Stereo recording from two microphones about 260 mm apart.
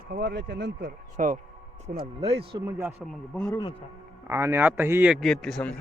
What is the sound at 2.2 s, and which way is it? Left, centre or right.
Speech, right.